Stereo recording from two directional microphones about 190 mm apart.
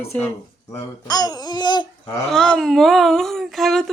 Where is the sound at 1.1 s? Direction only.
20° left (ahead or behind).